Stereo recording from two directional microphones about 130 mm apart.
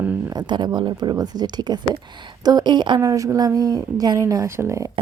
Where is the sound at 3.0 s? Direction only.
25° right (ahead or behind).